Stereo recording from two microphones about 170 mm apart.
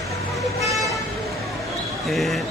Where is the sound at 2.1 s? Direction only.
Centre (ahead or behind).